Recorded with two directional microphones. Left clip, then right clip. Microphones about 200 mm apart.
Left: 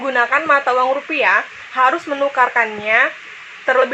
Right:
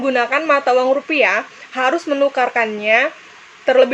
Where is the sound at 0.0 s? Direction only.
25° right (ahead or behind).